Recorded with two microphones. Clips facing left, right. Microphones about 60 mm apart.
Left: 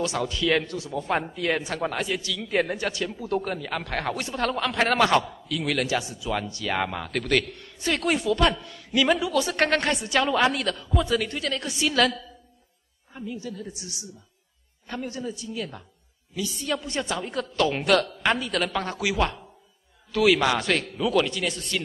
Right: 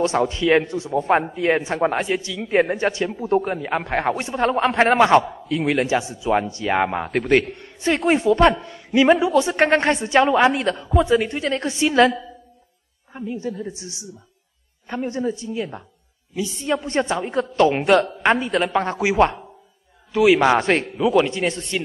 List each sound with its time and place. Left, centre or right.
0.0 s a man's voice: right